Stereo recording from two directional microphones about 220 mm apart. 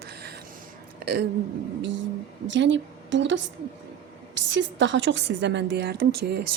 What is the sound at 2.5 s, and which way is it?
A woman's voice, 55° right (ahead or behind).